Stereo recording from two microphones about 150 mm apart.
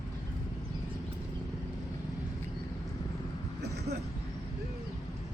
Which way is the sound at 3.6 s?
90° right.